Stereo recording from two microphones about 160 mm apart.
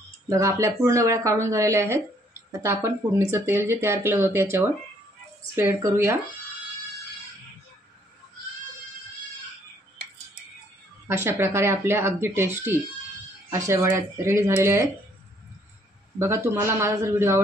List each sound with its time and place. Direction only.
0.3 s speech: 20° right (ahead or behind)
11.1 s speech: 15° right (ahead or behind)
16.2 s speech: 15° right (ahead or behind)